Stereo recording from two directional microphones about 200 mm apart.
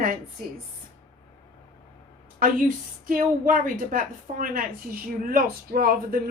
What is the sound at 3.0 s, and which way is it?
A woman's voice, 45° right (ahead or behind).